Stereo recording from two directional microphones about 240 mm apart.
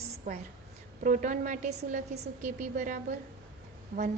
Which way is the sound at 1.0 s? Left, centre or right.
Right.